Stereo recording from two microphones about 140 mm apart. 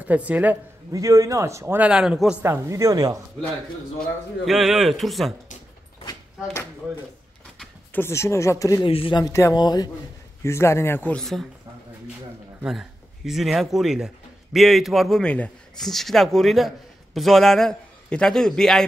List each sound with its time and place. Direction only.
0.0 s a woman's voice: 10° right (ahead or behind)
0.9 s a man's voice: 25° right (ahead or behind)
1.9 s a man's voice: 5° right (ahead or behind)
2.4 s a man's voice: 20° right (ahead or behind)
4.5 s a man's voice: centre (ahead or behind)
7.5 s speech: 15° left (ahead or behind)
8.8 s speech: 40° left (ahead or behind)
9.2 s speech: 20° left (ahead or behind)
11.1 s a man's voice: 5° left (ahead or behind)
12.6 s a man's voice: centre (ahead or behind)